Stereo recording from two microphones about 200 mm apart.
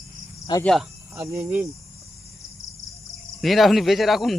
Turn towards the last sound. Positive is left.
turn(degrees=0)  # may be behind; listen again after turning